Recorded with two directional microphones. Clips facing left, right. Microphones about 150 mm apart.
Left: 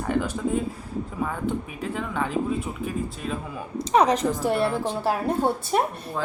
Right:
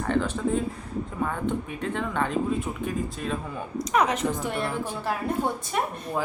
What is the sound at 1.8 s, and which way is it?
Speech, 5° left (ahead or behind).